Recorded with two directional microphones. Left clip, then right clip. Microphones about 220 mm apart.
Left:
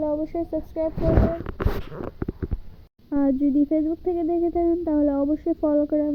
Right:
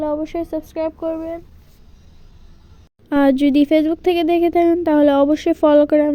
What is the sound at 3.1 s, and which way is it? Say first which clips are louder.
Speech: right 7 dB; 65° right (ahead or behind).